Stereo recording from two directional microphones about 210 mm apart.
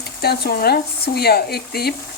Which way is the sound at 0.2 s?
50° left (ahead or behind).